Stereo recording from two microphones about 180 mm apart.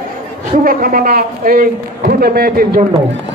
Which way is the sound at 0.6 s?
55° right (ahead or behind).